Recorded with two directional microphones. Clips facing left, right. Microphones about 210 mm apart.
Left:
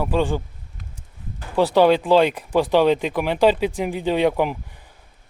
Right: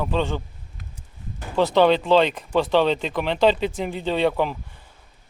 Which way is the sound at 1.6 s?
10° left (ahead or behind).